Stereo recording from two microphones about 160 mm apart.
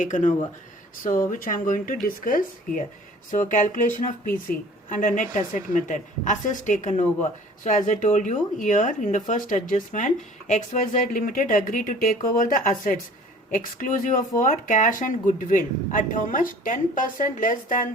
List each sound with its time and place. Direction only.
0.0 s speech: 55° left (ahead or behind)